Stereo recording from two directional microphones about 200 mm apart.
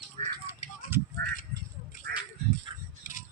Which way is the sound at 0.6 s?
40° left (ahead or behind).